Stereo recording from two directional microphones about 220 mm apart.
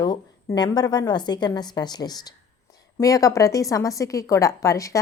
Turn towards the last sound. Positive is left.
turn(degrees=15)  # may be behind; listen again after turning